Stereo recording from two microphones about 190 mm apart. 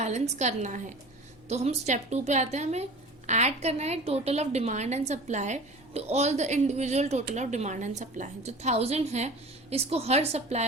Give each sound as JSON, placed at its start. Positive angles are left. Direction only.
{"t": 0.0, "sound": "a woman's voice", "side_deg": -35}